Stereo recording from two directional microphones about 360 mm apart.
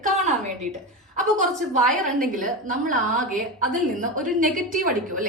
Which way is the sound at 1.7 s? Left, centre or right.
Right.